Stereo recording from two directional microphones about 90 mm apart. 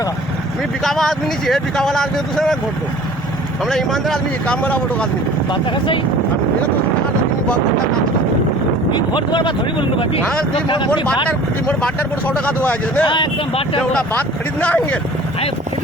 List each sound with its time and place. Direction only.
0.9 s speech: 5° left (ahead or behind)
3.7 s speech: 5° left (ahead or behind)
4.6 s speech: 15° left (ahead or behind)
8.9 s speech: 60° left (ahead or behind)
10.5 s speech: 60° left (ahead or behind)
11.3 s speech: 15° left (ahead or behind)
14.1 s speech: 15° left (ahead or behind)